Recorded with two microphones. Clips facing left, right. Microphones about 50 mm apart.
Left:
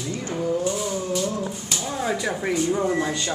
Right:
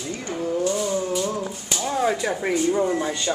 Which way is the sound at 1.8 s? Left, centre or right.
Centre.